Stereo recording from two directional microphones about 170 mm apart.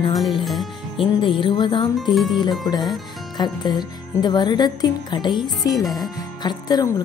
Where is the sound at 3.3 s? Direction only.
25° left (ahead or behind).